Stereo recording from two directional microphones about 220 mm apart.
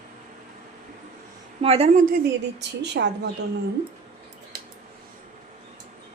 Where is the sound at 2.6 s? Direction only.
50° right (ahead or behind).